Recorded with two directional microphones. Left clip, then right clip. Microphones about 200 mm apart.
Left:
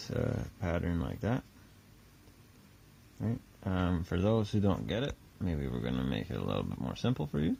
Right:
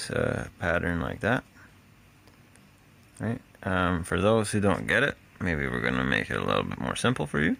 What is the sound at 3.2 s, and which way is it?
Speech, 15° right (ahead or behind).